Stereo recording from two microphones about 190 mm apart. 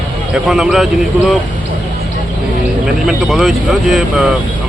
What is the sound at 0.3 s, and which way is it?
Speech, 5° right (ahead or behind).